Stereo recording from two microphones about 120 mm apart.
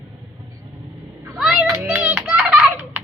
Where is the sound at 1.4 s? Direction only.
5° right (ahead or behind).